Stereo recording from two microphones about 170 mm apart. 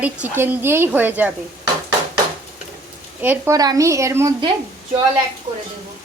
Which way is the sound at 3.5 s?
20° right (ahead or behind).